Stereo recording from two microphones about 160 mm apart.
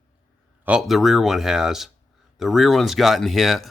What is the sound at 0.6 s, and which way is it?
Speech, 5° right (ahead or behind).